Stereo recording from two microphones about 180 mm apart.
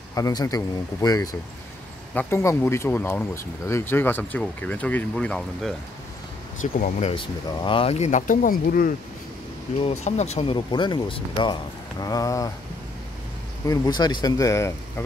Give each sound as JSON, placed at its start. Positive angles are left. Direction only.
{"t": 0.1, "sound": "speech", "side_deg": 20}
{"t": 6.6, "sound": "speech", "side_deg": 40}
{"t": 7.2, "sound": "speech", "side_deg": 30}
{"t": 9.8, "sound": "speech", "side_deg": 35}
{"t": 13.7, "sound": "speech", "side_deg": 25}